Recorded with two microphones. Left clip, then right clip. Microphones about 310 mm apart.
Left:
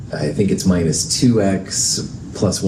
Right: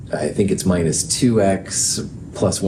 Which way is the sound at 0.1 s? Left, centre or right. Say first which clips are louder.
Even; right.